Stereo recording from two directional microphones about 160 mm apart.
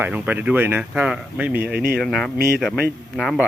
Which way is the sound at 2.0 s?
Centre (ahead or behind).